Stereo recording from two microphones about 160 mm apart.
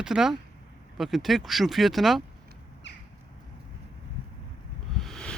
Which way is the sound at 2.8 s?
90° left.